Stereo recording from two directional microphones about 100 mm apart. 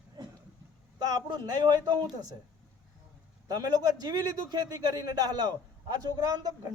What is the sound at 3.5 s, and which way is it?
A man's voice, 40° right (ahead or behind).